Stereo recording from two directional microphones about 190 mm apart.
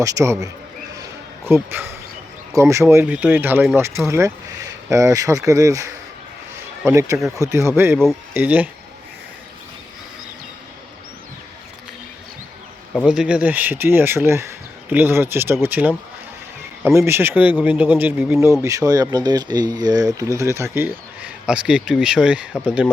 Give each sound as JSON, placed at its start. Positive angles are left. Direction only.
{"t": 0.0, "sound": "speech", "side_deg": -15}
{"t": 13.1, "sound": "speech", "side_deg": -5}